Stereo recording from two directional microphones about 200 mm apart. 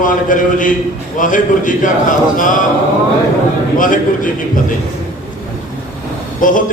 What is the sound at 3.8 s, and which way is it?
Speech, 40° left (ahead or behind).